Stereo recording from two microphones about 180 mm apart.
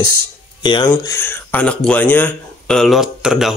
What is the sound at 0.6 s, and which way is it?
Speech, 25° left (ahead or behind).